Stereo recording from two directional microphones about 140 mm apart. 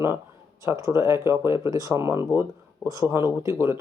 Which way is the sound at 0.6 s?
25° right (ahead or behind).